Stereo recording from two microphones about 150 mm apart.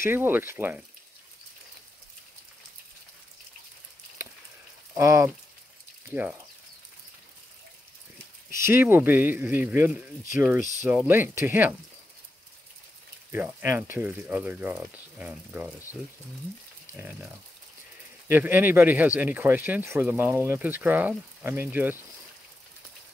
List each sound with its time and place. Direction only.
0.0 s speech: 15° right (ahead or behind)
4.9 s speech: 20° right (ahead or behind)
8.5 s speech: 15° right (ahead or behind)
13.3 s speech: 15° right (ahead or behind)
18.3 s speech: 15° right (ahead or behind)